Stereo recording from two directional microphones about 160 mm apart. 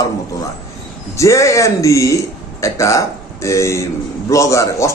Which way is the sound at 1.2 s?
20° left (ahead or behind).